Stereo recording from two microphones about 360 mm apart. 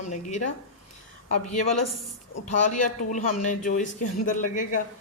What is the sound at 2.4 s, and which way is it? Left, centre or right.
A woman's voice, centre.